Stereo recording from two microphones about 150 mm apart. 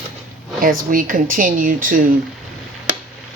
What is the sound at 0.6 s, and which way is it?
A woman's voice, 70° right (ahead or behind).